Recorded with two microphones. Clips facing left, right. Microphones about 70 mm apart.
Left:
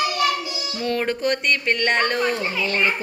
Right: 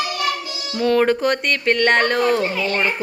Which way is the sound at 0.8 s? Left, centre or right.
Right.